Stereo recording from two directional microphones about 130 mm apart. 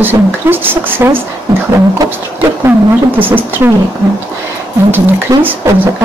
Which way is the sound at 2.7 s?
15° right (ahead or behind).